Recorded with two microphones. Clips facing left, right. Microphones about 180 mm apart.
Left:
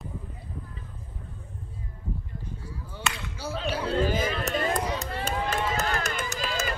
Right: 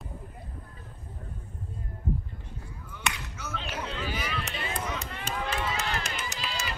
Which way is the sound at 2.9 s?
30° left (ahead or behind).